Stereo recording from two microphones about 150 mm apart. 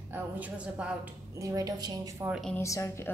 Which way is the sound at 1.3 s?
25° right (ahead or behind).